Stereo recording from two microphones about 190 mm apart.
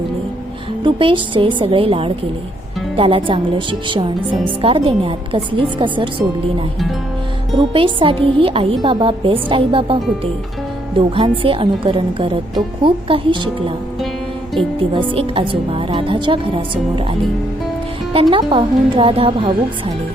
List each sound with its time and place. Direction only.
0.9 s a woman's voice: 25° right (ahead or behind)
7.7 s a woman's voice: 25° right (ahead or behind)
15.1 s a woman's voice: 30° right (ahead or behind)